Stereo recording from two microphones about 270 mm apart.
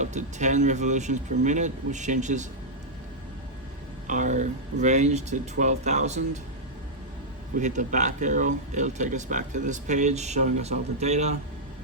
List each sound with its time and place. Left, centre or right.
0.0 s speech: right
4.0 s speech: right
7.6 s speech: right